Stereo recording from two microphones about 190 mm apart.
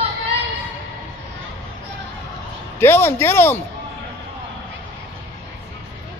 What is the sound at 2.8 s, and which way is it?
Speech, 10° left (ahead or behind).